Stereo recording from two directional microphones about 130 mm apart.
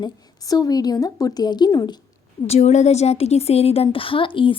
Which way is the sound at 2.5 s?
60° left (ahead or behind).